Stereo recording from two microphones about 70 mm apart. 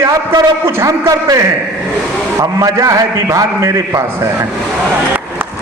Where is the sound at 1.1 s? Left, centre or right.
Right.